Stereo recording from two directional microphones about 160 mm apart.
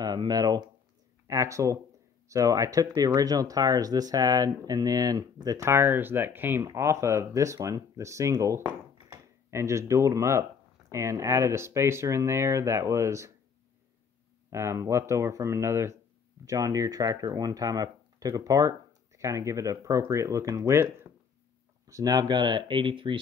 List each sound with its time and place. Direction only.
0.0 s speech: 25° right (ahead or behind)
14.5 s speech: 15° right (ahead or behind)